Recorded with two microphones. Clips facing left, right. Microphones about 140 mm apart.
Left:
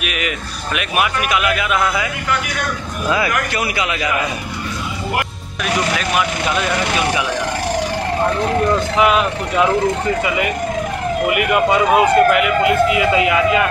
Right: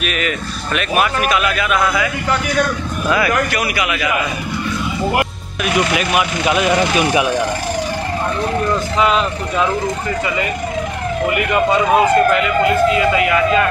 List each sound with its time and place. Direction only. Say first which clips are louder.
0.0 s speech: right 3 dB; 10° left (ahead or behind)
3.1 s a man's voice: right 2 dB; 25° left (ahead or behind)
5.9 s speech: right 2 dB; 10° right (ahead or behind)
8.9 s speech: left 1 dB; 10° left (ahead or behind)
11.2 s speech: even; 5° left (ahead or behind)